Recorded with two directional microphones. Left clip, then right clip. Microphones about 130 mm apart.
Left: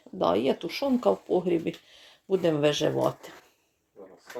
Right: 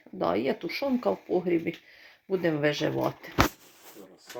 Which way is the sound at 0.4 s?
Centre (ahead or behind).